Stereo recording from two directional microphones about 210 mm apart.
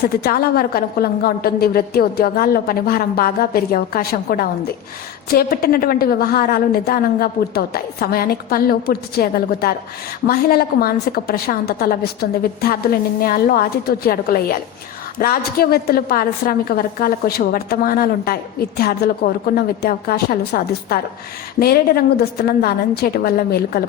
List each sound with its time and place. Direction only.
0.0 s a woman's voice: 50° left (ahead or behind)